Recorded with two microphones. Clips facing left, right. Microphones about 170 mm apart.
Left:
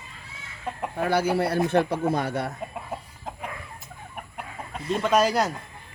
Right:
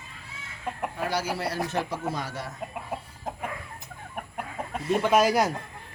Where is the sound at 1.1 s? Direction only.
55° left (ahead or behind).